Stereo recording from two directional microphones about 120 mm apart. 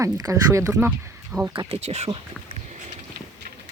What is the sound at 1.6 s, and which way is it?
Speech, 60° right (ahead or behind).